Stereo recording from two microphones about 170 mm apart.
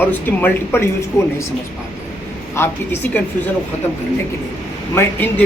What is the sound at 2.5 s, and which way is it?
Speech, 10° left (ahead or behind).